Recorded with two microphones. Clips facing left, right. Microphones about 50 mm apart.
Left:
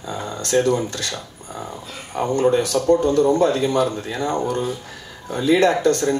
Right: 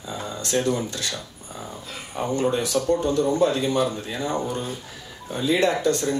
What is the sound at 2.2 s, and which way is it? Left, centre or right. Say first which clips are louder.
Speech: left 5 dB; left.